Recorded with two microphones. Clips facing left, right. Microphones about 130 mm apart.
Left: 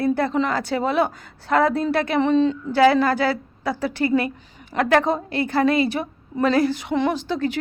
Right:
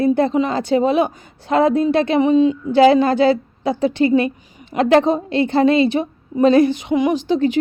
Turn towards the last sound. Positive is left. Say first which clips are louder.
# right 6 dB
turn(degrees=-20)  # may be behind; listen again after turning